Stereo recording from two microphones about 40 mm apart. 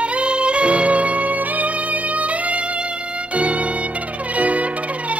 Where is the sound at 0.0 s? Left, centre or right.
Right.